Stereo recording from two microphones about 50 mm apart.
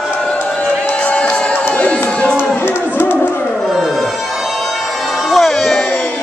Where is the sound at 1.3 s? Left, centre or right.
Left.